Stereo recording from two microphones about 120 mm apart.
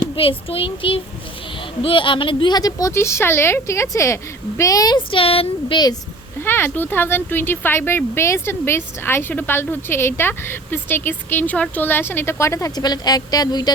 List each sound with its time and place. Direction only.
0.2 s speech: 50° left (ahead or behind); by 4.9 s 30° left (ahead or behind)
4.9 s speech: 50° left (ahead or behind)
6.4 s speech: 15° left (ahead or behind); by 13.7 s 35° left (ahead or behind)